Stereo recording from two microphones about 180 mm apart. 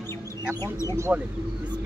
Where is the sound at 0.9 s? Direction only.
15° right (ahead or behind).